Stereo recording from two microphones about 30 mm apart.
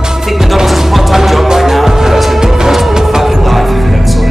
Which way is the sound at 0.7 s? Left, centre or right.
Centre.